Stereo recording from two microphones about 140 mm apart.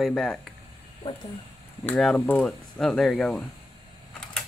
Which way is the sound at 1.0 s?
30° left (ahead or behind).